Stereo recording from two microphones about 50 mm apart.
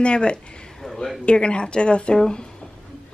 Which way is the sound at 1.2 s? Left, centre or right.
Left.